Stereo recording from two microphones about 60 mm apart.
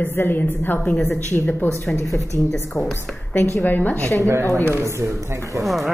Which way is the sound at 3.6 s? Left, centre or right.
Left.